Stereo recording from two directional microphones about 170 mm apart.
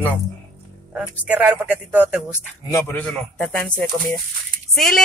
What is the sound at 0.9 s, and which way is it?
Speech, 10° right (ahead or behind).